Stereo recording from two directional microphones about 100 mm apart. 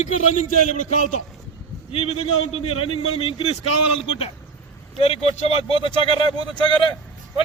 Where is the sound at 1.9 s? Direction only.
75° left (ahead or behind).